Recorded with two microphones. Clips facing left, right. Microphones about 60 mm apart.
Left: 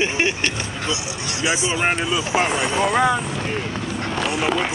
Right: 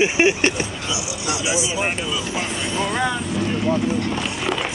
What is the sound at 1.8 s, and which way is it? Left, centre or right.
Speech, left.